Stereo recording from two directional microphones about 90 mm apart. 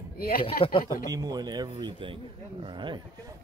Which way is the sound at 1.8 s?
65° right (ahead or behind).